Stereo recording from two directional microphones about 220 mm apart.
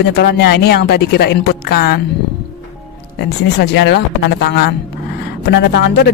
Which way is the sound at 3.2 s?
50° left (ahead or behind).